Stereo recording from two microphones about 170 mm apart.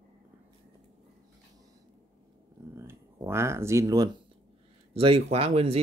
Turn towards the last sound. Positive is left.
turn(degrees=-35)  # may be behind; listen again after turning